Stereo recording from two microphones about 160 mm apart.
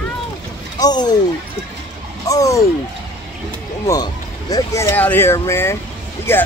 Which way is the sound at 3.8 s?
20° left (ahead or behind).